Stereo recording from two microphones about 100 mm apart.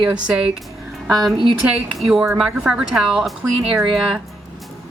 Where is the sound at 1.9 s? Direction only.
Centre (ahead or behind).